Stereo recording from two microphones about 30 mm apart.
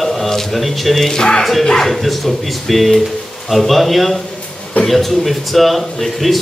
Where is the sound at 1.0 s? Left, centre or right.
Left.